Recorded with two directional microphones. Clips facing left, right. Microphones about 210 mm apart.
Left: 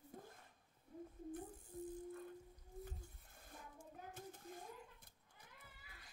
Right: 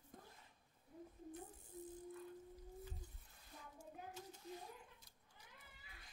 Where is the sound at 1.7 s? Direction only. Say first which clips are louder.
Left 4 dB; 50° left (ahead or behind).